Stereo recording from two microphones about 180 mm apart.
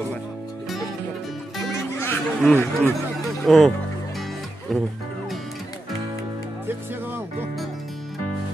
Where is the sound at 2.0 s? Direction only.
10° left (ahead or behind).